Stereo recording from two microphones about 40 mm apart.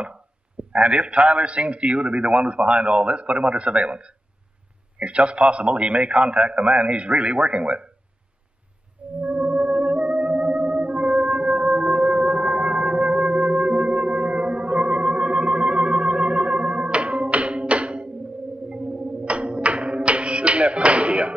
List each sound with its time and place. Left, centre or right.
0.7 s a man's voice: right
9.2 s theremin: right
18.7 s music: right